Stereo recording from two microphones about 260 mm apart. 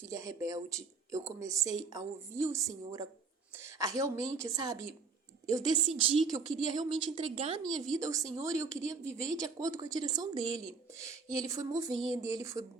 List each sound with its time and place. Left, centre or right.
0.0 s a woman's voice: centre